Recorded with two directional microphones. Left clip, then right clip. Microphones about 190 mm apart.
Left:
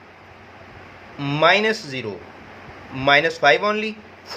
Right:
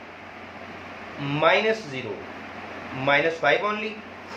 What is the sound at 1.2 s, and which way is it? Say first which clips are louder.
Speech: left 4 dB; 60° left (ahead or behind).